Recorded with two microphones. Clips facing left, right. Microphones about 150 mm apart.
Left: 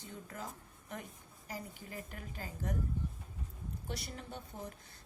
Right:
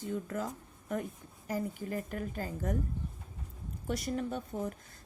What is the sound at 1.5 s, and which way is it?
A woman's voice, 45° right (ahead or behind).